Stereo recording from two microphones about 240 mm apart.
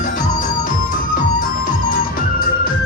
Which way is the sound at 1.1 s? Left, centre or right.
Left.